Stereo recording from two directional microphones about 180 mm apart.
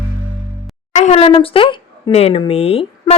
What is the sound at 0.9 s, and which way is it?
Speech, 35° left (ahead or behind).